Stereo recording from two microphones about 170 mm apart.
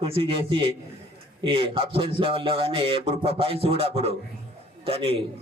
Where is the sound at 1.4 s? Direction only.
30° right (ahead or behind).